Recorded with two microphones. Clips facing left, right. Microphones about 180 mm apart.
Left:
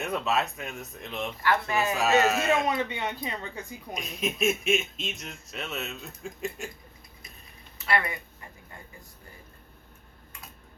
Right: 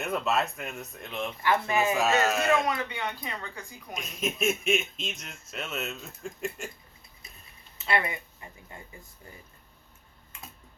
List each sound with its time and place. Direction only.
0.0 s speech: centre (ahead or behind)
1.4 s speech: 20° right (ahead or behind)
2.0 s speech: centre (ahead or behind)
2.6 s speech: 20° left (ahead or behind)
3.9 s speech: centre (ahead or behind)
7.9 s speech: 25° right (ahead or behind)